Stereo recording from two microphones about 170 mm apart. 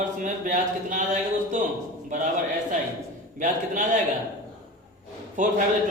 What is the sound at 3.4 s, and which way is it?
Speech, 50° right (ahead or behind).